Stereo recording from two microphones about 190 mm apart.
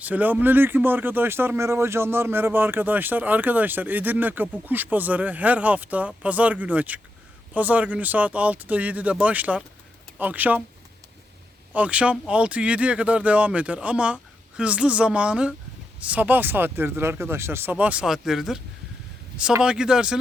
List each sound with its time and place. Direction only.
0.0 s speech: 10° right (ahead or behind)
11.7 s speech: 5° right (ahead or behind)